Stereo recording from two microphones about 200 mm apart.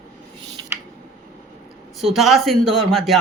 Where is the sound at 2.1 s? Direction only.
Centre (ahead or behind).